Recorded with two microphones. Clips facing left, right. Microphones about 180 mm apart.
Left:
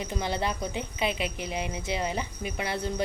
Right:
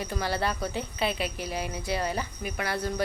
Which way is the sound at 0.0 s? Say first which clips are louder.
Right 1 dB; 20° left (ahead or behind).